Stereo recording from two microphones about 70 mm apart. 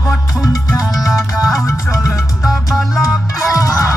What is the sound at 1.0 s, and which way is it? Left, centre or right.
Music, centre.